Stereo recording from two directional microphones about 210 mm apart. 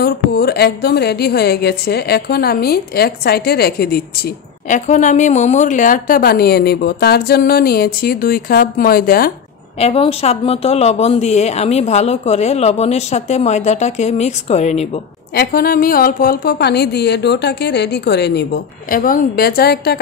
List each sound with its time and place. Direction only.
0.0 s a woman's voice: 50° left (ahead or behind)
4.6 s a woman's voice: 35° left (ahead or behind)
9.8 s speech: 30° left (ahead or behind)
15.3 s a woman's voice: 45° left (ahead or behind)